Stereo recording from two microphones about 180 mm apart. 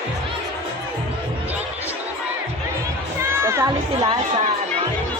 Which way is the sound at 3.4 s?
15° right (ahead or behind).